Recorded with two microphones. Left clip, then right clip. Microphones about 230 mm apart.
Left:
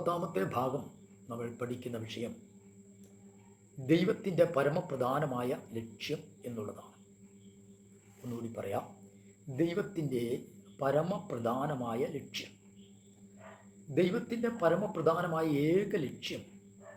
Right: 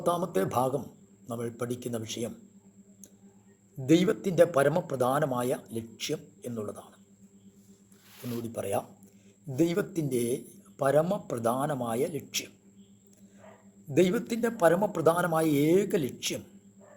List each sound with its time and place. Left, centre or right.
0.0 s speech: right
3.8 s speech: right
8.5 s speech: right
13.9 s speech: right